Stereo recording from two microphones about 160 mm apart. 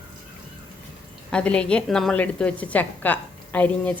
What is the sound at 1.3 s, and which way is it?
A woman's voice, 5° left (ahead or behind).